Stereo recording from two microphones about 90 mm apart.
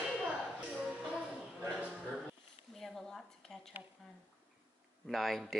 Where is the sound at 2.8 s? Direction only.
5° left (ahead or behind).